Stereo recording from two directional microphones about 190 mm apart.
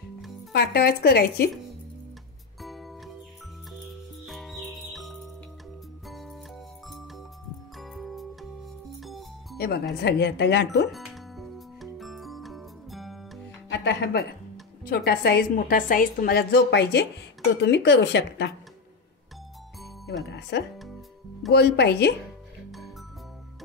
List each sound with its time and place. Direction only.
0.5 s a woman's voice: 55° left (ahead or behind)
2.6 s music: centre (ahead or behind)
4.3 s music: centre (ahead or behind)
7.7 s music: centre (ahead or behind)
9.6 s a woman's voice: 60° left (ahead or behind)
10.9 s music: centre (ahead or behind)
13.7 s a woman's voice: 60° left (ahead or behind)
20.2 s a woman's voice: 65° left (ahead or behind)